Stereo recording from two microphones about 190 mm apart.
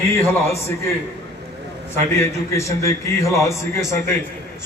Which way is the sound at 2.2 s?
15° left (ahead or behind).